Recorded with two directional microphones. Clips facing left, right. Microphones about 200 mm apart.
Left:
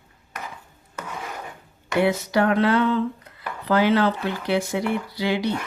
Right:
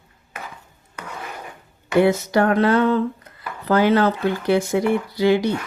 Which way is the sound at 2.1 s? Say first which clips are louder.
Right 3 dB; 45° right (ahead or behind).